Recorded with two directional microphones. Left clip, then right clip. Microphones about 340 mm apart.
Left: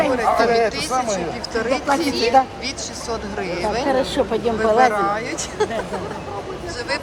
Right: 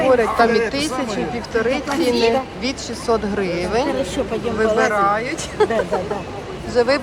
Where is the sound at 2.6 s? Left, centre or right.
Centre.